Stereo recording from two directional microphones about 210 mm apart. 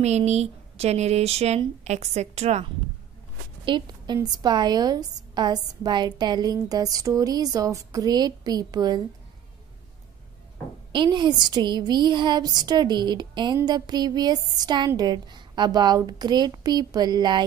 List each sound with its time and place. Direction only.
0.0 s speech: 30° right (ahead or behind)
3.6 s speech: 20° right (ahead or behind)
10.9 s speech: 20° right (ahead or behind)